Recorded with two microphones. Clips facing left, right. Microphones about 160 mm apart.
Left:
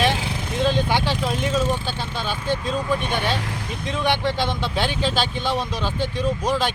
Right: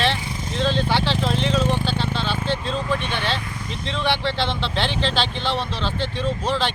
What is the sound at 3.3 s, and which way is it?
Speech, 75° left (ahead or behind).